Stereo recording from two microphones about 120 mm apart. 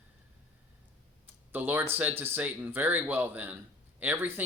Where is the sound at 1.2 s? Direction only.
15° right (ahead or behind).